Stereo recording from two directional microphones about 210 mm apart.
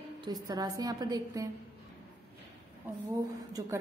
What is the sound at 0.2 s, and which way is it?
A woman's voice, 20° right (ahead or behind).